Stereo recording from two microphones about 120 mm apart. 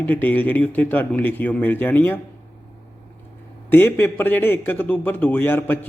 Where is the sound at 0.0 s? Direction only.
15° left (ahead or behind).